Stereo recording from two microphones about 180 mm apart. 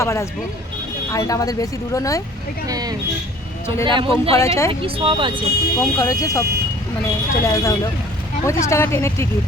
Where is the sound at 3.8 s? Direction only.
25° right (ahead or behind).